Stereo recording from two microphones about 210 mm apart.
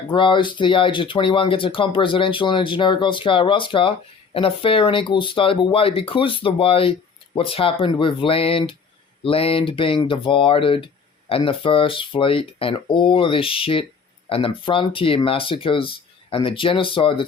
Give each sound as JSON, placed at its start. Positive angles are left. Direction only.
{"t": 0.1, "sound": "speech", "side_deg": 25}